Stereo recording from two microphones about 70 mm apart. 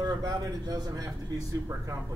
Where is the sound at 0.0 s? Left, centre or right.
Right.